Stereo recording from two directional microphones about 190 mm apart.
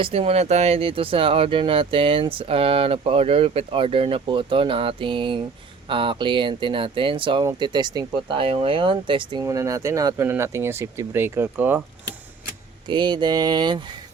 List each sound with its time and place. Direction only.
0.0 s speech: 30° right (ahead or behind); by 11.8 s 10° right (ahead or behind)
12.9 s speech: 25° right (ahead or behind)